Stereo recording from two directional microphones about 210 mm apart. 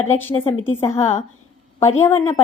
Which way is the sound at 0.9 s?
35° left (ahead or behind).